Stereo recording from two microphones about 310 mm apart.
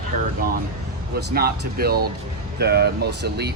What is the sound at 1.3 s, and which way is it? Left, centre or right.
Speech, right.